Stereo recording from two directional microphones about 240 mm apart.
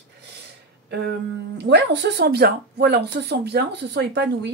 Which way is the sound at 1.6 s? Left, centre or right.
Right.